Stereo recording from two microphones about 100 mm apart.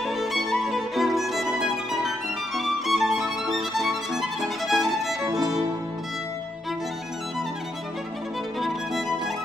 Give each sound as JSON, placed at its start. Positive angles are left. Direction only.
{"t": 0.0, "sound": "music", "side_deg": 0}
{"t": 5.2, "sound": "music", "side_deg": -35}
{"t": 8.5, "sound": "music", "side_deg": 0}